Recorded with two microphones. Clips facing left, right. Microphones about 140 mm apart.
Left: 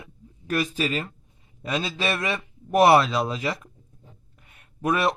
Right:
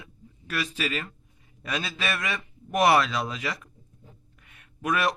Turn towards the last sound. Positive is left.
turn(degrees=30)  # may be behind; listen again after turning